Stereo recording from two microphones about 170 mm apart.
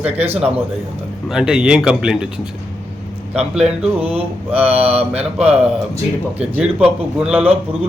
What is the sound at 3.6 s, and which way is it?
Mantra, 35° right (ahead or behind).